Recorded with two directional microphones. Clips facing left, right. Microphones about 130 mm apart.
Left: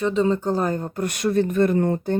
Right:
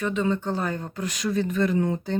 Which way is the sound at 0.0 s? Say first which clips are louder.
Left 5 dB; 35° left (ahead or behind).